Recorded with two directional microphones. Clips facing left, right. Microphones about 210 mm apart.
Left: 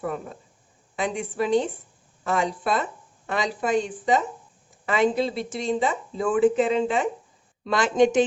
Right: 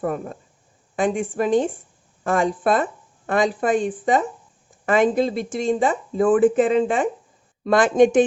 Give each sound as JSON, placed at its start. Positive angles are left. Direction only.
{"t": 0.0, "sound": "speech", "side_deg": -50}